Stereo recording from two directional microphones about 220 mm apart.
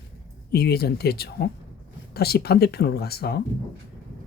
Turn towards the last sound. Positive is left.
turn(degrees=45)  # may be behind; listen again after turning